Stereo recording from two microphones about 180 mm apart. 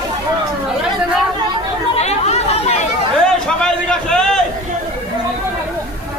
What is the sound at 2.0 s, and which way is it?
Chatter, 35° left (ahead or behind).